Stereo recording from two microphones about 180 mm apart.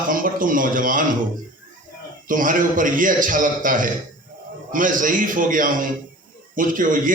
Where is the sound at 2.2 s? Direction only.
50° right (ahead or behind).